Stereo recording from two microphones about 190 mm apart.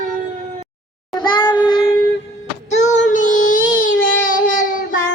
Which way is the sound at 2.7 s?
40° left (ahead or behind).